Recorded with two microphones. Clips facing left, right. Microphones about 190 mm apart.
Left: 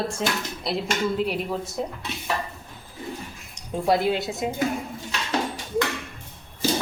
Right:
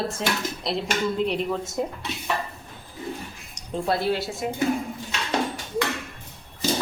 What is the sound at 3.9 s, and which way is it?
Speech, 15° left (ahead or behind).